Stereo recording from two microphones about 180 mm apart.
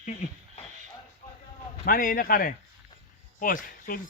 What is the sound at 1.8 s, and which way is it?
Speech, 50° left (ahead or behind).